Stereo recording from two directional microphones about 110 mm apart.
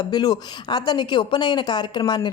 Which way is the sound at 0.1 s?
40° left (ahead or behind).